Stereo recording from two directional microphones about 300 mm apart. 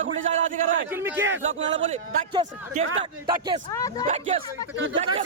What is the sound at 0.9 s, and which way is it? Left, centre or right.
Speech, centre.